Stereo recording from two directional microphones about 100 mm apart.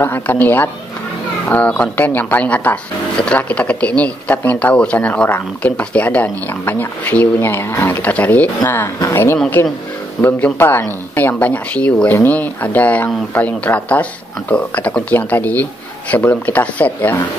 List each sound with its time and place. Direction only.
0.0 s speech: 20° left (ahead or behind)